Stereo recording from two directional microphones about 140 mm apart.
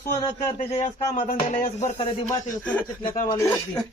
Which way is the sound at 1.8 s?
45° left (ahead or behind).